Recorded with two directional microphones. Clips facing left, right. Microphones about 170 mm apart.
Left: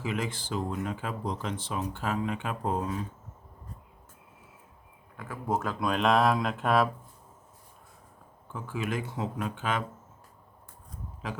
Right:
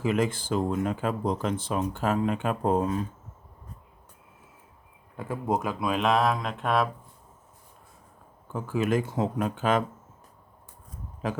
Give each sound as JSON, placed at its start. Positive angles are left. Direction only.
{"t": 0.0, "sound": "speech", "side_deg": -45}
{"t": 5.1, "sound": "speech", "side_deg": -25}
{"t": 5.8, "sound": "speech", "side_deg": 0}
{"t": 8.5, "sound": "speech", "side_deg": -45}